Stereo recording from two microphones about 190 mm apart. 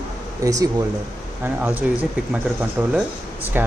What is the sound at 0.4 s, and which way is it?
Speech, 20° right (ahead or behind).